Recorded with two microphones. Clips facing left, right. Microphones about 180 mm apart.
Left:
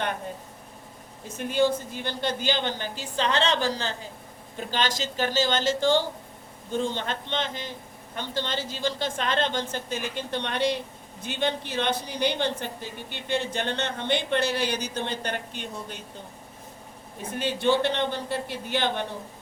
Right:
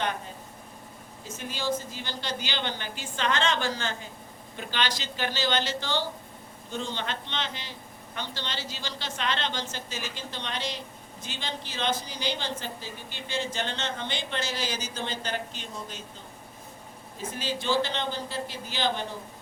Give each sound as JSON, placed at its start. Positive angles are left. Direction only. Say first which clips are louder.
{"t": 1.4, "sound": "a woman's voice", "louder": "left 7 dB", "side_deg": 60}
{"t": 17.3, "sound": "a woman's voice", "louder": "left 4 dB", "side_deg": 60}